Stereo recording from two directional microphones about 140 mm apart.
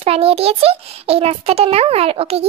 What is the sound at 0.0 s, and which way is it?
A child's voice, 45° right (ahead or behind).